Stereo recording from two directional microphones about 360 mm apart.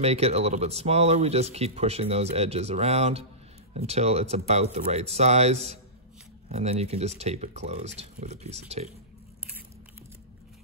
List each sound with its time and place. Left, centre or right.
0.0 s speech: centre